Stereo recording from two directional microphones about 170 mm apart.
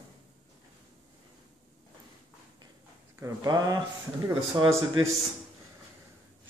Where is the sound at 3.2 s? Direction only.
25° right (ahead or behind).